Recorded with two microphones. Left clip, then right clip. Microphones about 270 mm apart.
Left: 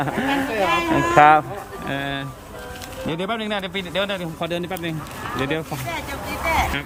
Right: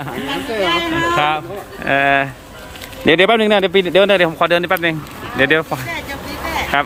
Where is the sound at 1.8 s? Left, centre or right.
Centre.